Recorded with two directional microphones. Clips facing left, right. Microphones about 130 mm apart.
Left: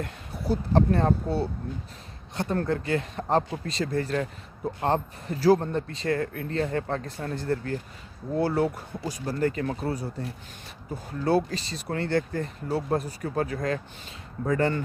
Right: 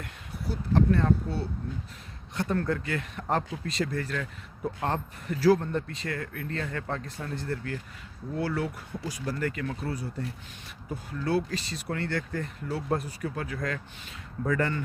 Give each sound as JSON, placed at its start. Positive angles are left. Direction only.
{"t": 0.0, "sound": "speech", "side_deg": 35}
{"t": 11.2, "sound": "speech", "side_deg": 35}